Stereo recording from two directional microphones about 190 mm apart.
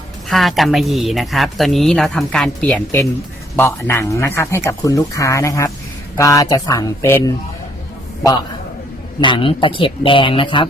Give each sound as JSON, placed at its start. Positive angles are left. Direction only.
{"t": 0.3, "sound": "speech", "side_deg": 0}
{"t": 9.2, "sound": "speech", "side_deg": 25}